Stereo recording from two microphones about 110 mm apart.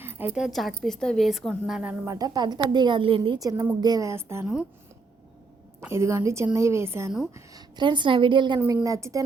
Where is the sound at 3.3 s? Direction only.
35° right (ahead or behind).